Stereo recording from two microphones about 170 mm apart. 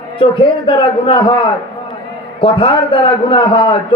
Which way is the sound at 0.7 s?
30° left (ahead or behind).